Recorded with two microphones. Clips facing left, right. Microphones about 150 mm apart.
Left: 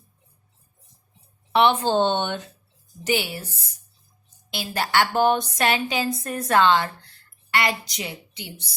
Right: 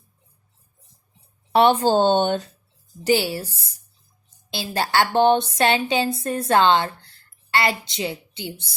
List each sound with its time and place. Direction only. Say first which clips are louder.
1.5 s a woman's voice: right 3 dB; 40° right (ahead or behind)